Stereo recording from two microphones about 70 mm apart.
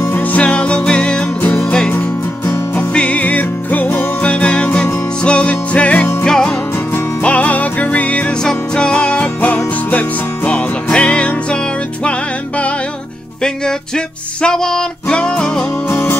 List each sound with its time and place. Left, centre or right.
0.1 s music: left
1.9 s music: left
4.3 s music: centre
6.2 s music: centre
7.2 s music: left
15.9 s music: left